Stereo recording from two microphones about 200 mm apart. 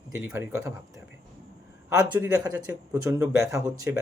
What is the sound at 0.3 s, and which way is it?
Speech, 15° right (ahead or behind).